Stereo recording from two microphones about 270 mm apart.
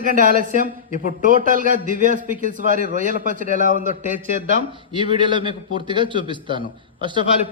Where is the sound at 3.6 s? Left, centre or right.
Left.